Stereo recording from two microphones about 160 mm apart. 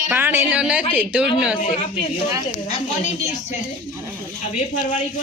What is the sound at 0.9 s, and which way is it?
Speech, 5° right (ahead or behind).